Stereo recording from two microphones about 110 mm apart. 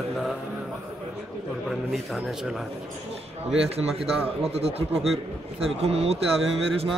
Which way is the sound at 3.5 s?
65° right (ahead or behind).